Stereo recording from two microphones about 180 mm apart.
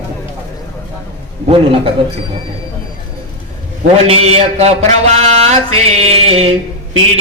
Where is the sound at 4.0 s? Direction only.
35° right (ahead or behind).